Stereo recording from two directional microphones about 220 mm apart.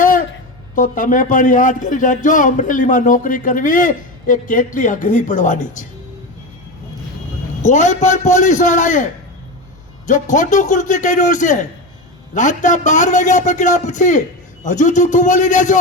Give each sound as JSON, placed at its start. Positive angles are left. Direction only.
{"t": 0.0, "sound": "a sound", "side_deg": 40}
{"t": 0.8, "sound": "a man's voice", "side_deg": 35}
{"t": 7.6, "sound": "a man's voice", "side_deg": 35}
{"t": 10.1, "sound": "a man's voice", "side_deg": 35}